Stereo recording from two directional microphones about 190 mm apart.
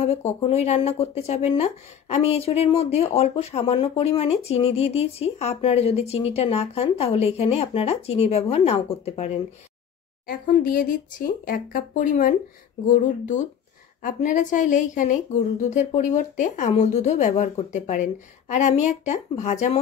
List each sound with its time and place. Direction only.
0.0 s speech: 35° left (ahead or behind)
10.2 s speech: 45° left (ahead or behind)